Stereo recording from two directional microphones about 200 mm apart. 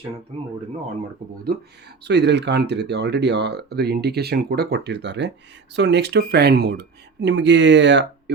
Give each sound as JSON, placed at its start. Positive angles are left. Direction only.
{"t": 0.3, "sound": "speech", "side_deg": -30}
{"t": 2.0, "sound": "speech", "side_deg": -60}